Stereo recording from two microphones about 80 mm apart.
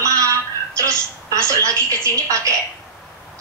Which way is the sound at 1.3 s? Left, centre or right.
Right.